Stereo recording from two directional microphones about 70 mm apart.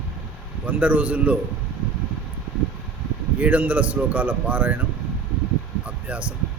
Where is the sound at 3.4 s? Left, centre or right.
Right.